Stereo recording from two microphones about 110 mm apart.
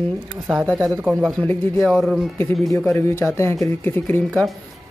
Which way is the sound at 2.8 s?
20° left (ahead or behind).